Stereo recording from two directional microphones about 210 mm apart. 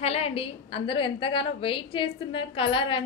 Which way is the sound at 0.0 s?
30° left (ahead or behind).